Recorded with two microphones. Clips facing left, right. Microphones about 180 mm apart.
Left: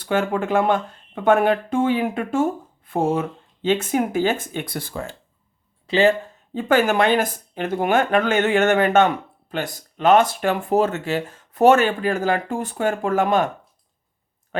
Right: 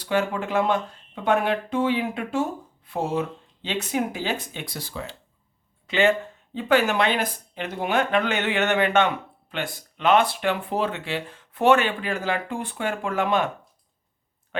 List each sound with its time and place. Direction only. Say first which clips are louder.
0.0 s speech: left 3 dB; 50° left (ahead or behind)
5.9 s speech: left 4 dB; 35° left (ahead or behind)
14.5 s a sound: left 2 dB; 40° left (ahead or behind)